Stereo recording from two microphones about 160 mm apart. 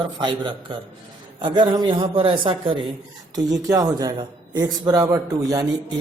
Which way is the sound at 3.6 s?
20° right (ahead or behind).